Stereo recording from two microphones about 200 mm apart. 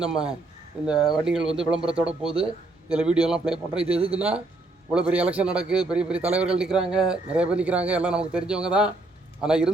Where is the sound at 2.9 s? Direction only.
5° right (ahead or behind).